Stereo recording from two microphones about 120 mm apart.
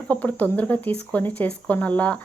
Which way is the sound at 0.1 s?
15° left (ahead or behind).